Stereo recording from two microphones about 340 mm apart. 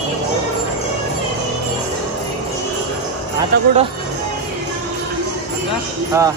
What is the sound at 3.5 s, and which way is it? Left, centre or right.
Speech, right.